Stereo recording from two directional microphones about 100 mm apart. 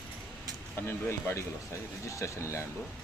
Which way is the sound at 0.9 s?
25° left (ahead or behind).